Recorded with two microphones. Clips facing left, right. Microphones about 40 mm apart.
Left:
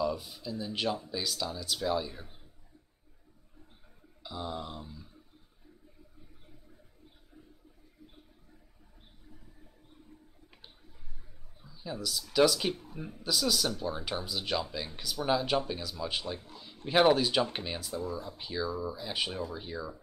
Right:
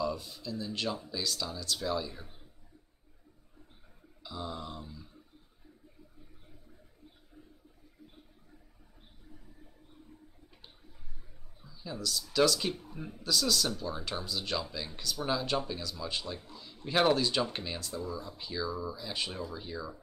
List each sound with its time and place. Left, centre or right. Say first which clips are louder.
0.0 s speech: left 2 dB; centre
4.2 s speech: left 2 dB; centre
11.6 s a sound: left 1 dB; centre
12.4 s speech: left 2 dB; centre
12.8 s speech: left 1 dB; centre
13.7 s speech: left 2 dB; left
16.4 s a sound: even; left
16.8 s speech: left 3 dB; centre